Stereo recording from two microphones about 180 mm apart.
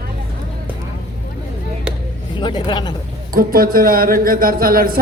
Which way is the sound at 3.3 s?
55° right (ahead or behind).